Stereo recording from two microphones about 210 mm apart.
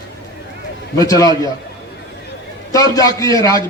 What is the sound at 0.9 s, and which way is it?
Speech, 15° left (ahead or behind).